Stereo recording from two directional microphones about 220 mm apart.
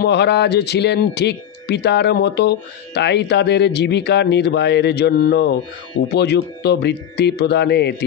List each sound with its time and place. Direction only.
0.0 s a man's voice: 50° left (ahead or behind)